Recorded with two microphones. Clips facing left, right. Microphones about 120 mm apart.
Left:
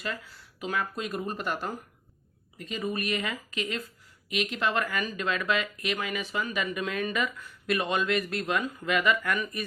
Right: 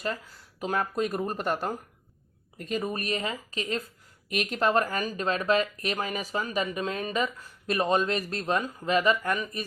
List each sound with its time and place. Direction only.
0.6 s speech: 40° right (ahead or behind)